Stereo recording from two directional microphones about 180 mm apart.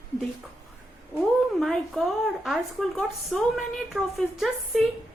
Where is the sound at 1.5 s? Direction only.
Centre (ahead or behind).